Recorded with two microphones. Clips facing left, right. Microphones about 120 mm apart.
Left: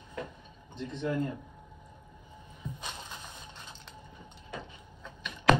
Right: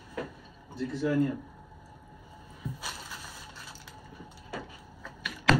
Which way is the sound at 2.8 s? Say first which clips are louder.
Right 1 dB; 20° left (ahead or behind).